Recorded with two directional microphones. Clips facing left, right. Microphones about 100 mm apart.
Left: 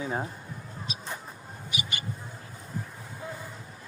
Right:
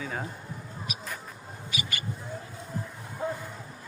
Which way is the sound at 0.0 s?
25° left (ahead or behind).